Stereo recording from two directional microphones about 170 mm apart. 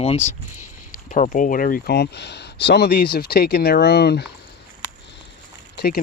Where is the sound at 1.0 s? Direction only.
50° left (ahead or behind); by 4.3 s 70° left (ahead or behind).